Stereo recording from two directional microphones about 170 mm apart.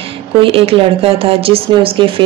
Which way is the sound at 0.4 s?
35° right (ahead or behind).